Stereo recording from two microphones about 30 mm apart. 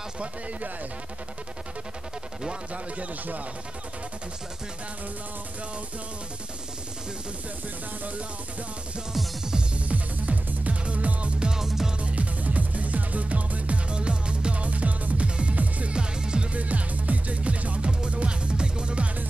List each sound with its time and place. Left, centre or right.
9.8 s music: right
11.5 s music: centre
12.0 s music: right
13.8 s music: right
15.2 s music: right
15.5 s music: right
15.9 s music: right
16.5 s music: right